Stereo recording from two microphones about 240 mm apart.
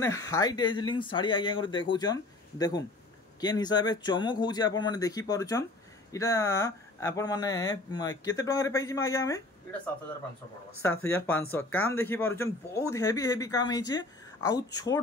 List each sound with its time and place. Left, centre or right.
0.0 s speech: centre
3.3 s speech: centre
11.1 s speech: centre